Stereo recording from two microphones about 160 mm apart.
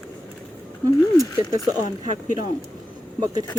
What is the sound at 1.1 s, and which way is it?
Speech, 20° left (ahead or behind).